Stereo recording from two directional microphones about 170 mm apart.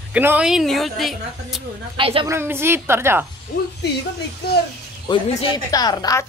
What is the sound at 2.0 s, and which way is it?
Speech, 35° right (ahead or behind).